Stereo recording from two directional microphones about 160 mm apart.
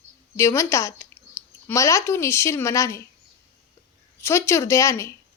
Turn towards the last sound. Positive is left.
turn(degrees=20)  # may be behind; listen again after turning